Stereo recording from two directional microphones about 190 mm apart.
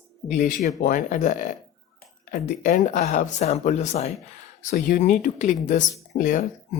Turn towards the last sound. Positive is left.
turn(degrees=45)  # may be behind; listen again after turning